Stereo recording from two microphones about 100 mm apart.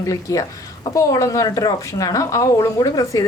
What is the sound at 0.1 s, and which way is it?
Speech, 35° left (ahead or behind).